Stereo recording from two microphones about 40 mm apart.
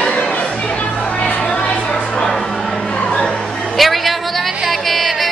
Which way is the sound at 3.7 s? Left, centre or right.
Centre.